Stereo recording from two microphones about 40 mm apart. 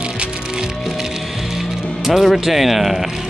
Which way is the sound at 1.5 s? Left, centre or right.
Centre.